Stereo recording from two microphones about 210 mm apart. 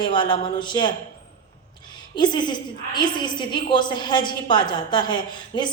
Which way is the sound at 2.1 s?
20° left (ahead or behind).